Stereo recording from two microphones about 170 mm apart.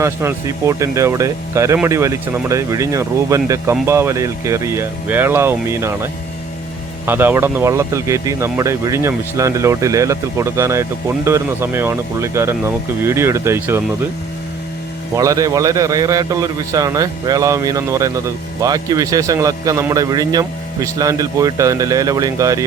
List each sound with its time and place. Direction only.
0.0 s speech: 15° right (ahead or behind)
15.1 s a man's voice: 20° right (ahead or behind)